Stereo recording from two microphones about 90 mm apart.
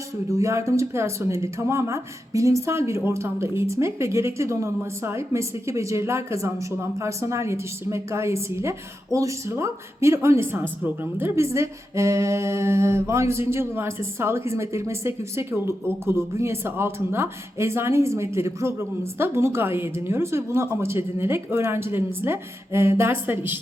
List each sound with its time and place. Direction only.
0.3 s speech: 35° right (ahead or behind)